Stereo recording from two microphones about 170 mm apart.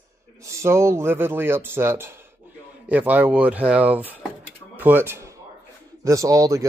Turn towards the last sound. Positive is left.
turn(degrees=-20)  # may be behind; listen again after turning